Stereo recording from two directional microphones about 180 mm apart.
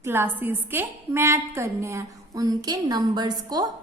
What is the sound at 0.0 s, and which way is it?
A woman's voice, 10° right (ahead or behind).